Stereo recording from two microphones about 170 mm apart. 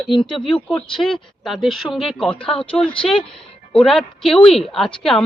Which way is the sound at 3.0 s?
Centre (ahead or behind).